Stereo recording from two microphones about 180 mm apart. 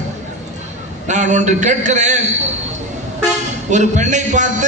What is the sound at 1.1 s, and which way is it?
A man's voice, 40° right (ahead or behind).